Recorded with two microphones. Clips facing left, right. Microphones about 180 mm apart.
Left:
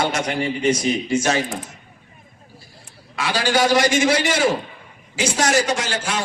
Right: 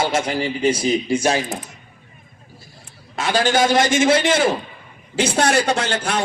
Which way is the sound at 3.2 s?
50° right (ahead or behind).